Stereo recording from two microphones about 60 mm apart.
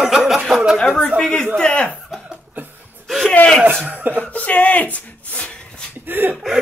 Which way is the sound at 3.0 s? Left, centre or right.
Centre.